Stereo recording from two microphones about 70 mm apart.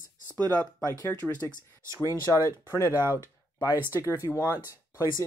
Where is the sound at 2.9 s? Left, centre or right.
Right.